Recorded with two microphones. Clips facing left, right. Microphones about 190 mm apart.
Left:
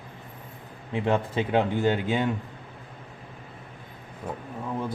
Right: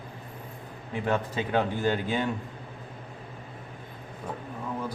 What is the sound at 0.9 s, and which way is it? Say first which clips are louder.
Speech: left 3 dB; 25° left (ahead or behind).